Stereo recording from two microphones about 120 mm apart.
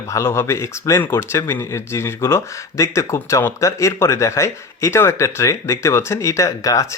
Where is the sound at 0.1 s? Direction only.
25° left (ahead or behind).